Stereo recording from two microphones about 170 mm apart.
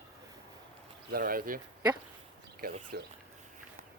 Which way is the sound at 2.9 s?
70° right (ahead or behind).